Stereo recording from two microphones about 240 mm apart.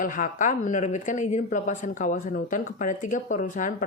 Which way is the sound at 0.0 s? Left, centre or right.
Left.